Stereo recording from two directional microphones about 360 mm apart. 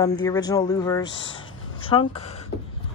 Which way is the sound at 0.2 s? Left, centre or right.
Centre.